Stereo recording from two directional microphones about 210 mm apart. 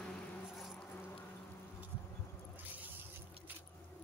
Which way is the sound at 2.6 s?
10° right (ahead or behind).